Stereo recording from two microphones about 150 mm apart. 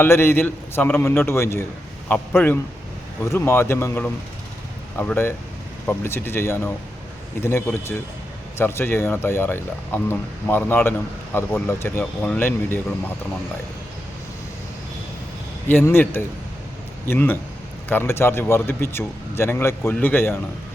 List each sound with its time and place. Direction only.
0.0 s speech: 15° left (ahead or behind)
15.7 s speech: 15° left (ahead or behind)